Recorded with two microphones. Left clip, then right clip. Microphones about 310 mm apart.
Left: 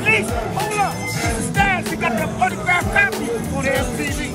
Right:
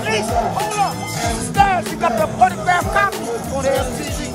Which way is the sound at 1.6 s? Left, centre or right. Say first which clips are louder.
Right 4 dB; centre.